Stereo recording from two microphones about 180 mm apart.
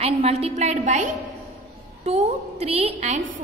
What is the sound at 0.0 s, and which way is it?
A woman's voice, 35° right (ahead or behind).